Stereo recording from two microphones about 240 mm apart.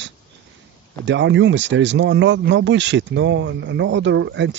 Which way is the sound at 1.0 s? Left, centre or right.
Right.